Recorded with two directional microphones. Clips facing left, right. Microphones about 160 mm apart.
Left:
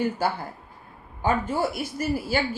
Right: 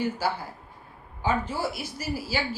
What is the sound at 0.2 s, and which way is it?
A woman's voice, 50° left (ahead or behind).